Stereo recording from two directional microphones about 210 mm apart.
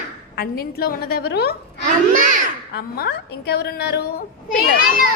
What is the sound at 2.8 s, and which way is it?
A woman's voice, 50° left (ahead or behind).